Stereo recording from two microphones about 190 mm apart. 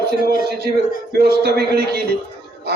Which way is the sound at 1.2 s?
55° right (ahead or behind).